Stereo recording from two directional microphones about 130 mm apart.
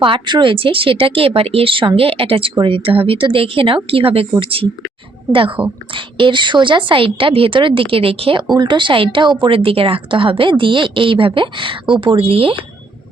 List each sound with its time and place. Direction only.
0.0 s a woman's voice: 40° right (ahead or behind)